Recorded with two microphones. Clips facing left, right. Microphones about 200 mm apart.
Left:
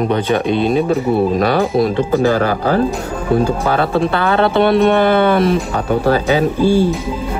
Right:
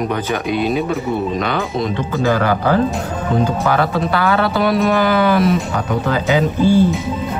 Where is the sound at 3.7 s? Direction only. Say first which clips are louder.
Left 2 dB; 30° left (ahead or behind).